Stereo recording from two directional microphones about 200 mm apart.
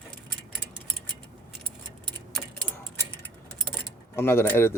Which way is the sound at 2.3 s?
5° left (ahead or behind).